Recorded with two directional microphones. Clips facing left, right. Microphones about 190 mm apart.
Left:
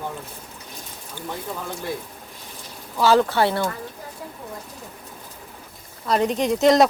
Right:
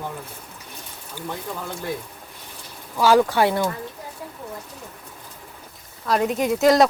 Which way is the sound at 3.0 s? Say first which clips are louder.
Right 1 dB; 10° right (ahead or behind).